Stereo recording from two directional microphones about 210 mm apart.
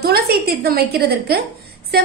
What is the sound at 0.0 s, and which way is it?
A woman's voice, 45° right (ahead or behind).